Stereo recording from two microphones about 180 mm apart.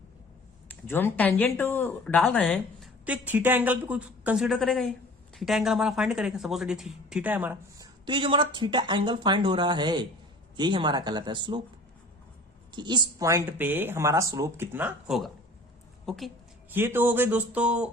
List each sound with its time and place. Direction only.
0.7 s speech: 10° left (ahead or behind)
3.2 s speech: 10° right (ahead or behind)
8.0 s speech: 25° right (ahead or behind)
12.7 s a woman's voice: 25° right (ahead or behind); by 16.3 s centre (ahead or behind)
16.7 s speech: 10° right (ahead or behind)